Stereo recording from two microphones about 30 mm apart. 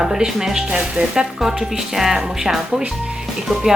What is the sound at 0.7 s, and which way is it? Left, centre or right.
Speech, right.